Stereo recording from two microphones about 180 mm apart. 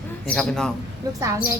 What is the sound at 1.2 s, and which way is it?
Speech, 15° right (ahead or behind).